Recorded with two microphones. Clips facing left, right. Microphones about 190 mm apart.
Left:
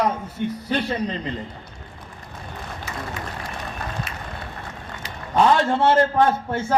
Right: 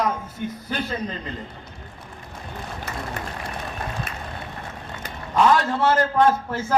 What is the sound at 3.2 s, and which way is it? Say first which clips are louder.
Applause: even; 60° right (ahead or behind).